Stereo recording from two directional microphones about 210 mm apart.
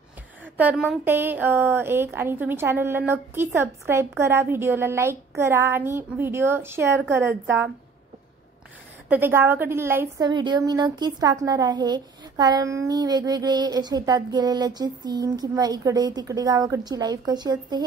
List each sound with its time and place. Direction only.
0.6 s a woman's voice: 5° right (ahead or behind)
9.1 s a woman's voice: 10° right (ahead or behind)